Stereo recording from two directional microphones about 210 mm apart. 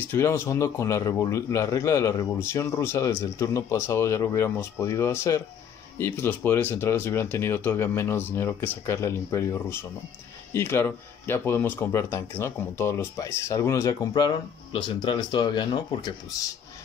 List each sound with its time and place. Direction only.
0.1 s speech: 15° left (ahead or behind)